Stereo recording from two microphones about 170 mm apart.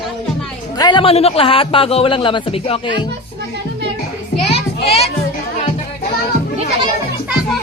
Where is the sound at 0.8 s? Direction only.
25° left (ahead or behind).